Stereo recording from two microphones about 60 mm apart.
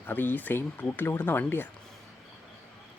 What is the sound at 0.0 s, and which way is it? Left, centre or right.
Speech, left.